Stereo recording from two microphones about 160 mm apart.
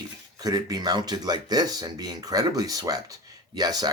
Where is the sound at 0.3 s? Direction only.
25° right (ahead or behind).